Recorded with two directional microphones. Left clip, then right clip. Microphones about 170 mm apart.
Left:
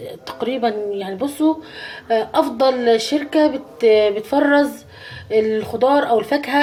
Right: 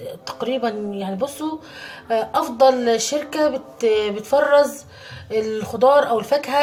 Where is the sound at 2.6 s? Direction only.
20° left (ahead or behind).